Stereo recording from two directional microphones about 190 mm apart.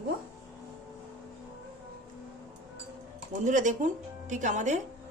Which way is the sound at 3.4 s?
40° right (ahead or behind).